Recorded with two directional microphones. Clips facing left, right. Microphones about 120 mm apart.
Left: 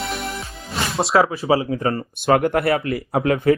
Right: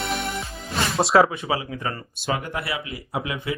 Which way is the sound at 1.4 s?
35° left (ahead or behind).